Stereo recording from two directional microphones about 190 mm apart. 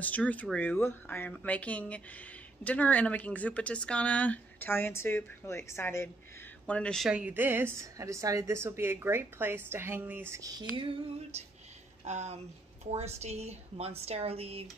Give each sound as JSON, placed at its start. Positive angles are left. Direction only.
{"t": 0.0, "sound": "a woman's voice", "side_deg": 10}
{"t": 10.8, "sound": "female singing", "side_deg": -30}
{"t": 12.0, "sound": "speech", "side_deg": -35}